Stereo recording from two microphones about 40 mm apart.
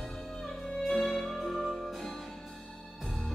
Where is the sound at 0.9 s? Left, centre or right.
Centre.